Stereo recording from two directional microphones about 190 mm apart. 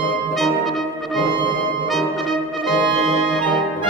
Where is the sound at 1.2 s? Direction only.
25° right (ahead or behind).